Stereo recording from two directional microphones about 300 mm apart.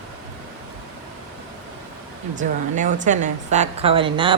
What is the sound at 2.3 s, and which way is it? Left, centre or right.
A woman's voice, right.